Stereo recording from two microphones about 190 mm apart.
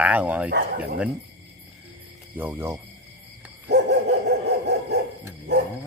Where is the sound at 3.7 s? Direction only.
60° right (ahead or behind).